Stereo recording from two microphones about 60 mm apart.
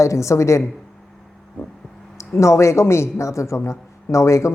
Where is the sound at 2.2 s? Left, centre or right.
Left.